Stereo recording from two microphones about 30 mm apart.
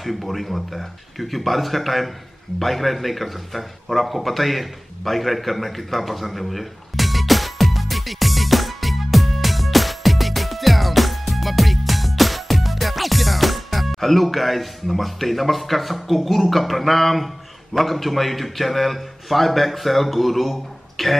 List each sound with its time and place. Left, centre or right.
0.0 s a man's voice: centre
2.6 s a sound: centre
17.7 s a man's voice: centre